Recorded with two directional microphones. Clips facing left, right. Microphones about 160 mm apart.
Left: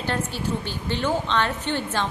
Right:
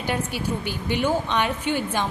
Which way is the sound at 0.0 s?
10° right (ahead or behind).